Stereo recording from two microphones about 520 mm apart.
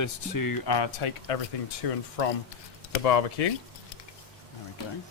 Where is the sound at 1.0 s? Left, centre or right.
Left.